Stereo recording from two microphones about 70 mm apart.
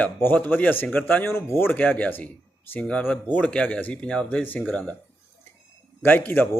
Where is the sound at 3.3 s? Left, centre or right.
Centre.